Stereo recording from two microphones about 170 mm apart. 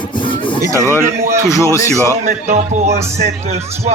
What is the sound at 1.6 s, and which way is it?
Speech, 15° left (ahead or behind).